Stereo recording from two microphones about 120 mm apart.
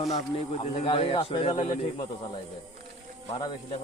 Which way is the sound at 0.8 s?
50° left (ahead or behind).